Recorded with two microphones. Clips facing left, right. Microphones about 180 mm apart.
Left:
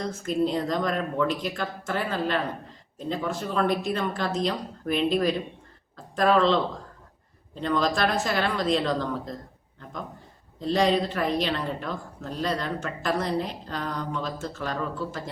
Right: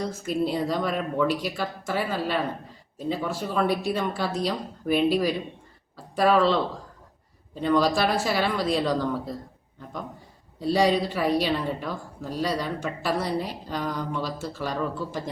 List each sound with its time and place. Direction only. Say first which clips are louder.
0.0 s a woman's voice: left 1 dB; 10° right (ahead or behind)
7.6 s a woman's voice: right 3 dB; 10° right (ahead or behind)
10.6 s a woman's voice: right 1 dB; 10° right (ahead or behind)